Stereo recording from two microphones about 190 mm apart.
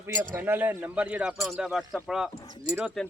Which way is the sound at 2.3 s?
25° left (ahead or behind).